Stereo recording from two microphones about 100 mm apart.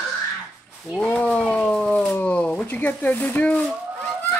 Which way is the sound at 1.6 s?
10° left (ahead or behind).